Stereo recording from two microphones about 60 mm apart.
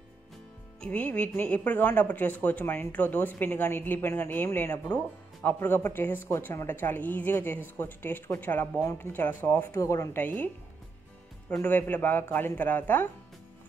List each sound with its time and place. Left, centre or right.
0.7 s speech: centre; by 9.8 s left
9.8 s speech: left
10.1 s speech: left
11.6 s speech: left